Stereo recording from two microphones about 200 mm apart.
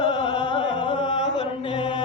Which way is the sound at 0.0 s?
25° left (ahead or behind).